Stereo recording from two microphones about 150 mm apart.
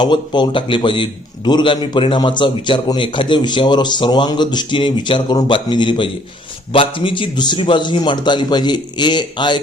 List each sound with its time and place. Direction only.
0.0 s a man's voice: 30° left (ahead or behind)